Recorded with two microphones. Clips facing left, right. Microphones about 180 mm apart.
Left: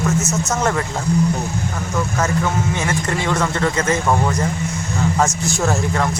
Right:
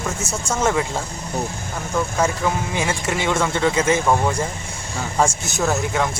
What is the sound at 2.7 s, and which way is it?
Speech, 10° right (ahead or behind).